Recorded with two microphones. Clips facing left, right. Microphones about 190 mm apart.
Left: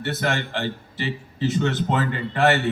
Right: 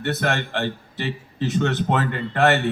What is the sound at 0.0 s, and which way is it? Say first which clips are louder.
A man's voice: right 1 dB; 60° right (ahead or behind).